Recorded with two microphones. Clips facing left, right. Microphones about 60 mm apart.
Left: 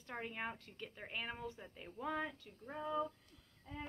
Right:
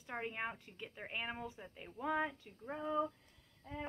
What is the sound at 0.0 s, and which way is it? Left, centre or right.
Speech, centre.